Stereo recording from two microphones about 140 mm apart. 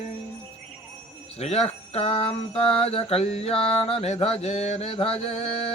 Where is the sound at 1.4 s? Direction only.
50° left (ahead or behind).